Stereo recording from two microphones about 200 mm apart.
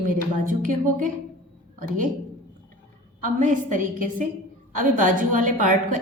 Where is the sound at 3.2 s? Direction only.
40° right (ahead or behind).